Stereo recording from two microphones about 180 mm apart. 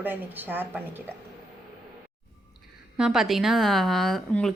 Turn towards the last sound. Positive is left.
turn(degrees=0)  # may be behind; listen again after turning